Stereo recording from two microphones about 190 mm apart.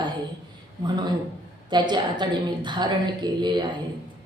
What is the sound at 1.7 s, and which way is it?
A woman's voice, 25° right (ahead or behind).